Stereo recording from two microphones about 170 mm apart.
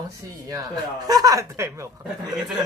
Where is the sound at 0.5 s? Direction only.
20° right (ahead or behind).